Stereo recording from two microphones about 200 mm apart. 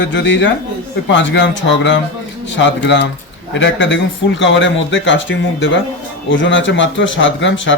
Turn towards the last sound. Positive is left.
turn(degrees=70)  # may be behind; listen again after turning